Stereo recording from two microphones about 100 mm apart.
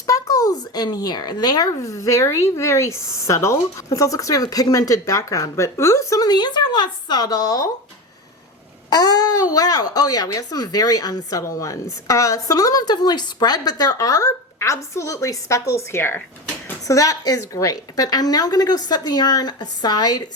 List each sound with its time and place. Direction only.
0.1 s speech: 35° left (ahead or behind)
8.9 s speech: 40° left (ahead or behind); by 16.2 s 25° left (ahead or behind)
16.8 s speech: 35° left (ahead or behind)